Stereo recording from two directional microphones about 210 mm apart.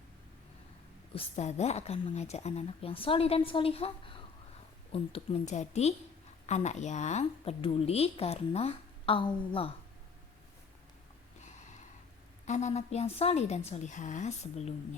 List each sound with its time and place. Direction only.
1.1 s a woman's voice: 30° left (ahead or behind)
12.5 s a woman's voice: 35° left (ahead or behind)